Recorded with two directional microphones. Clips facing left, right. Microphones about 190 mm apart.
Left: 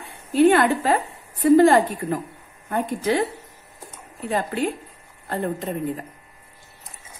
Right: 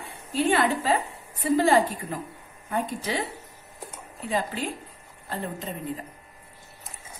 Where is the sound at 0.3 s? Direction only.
60° left (ahead or behind).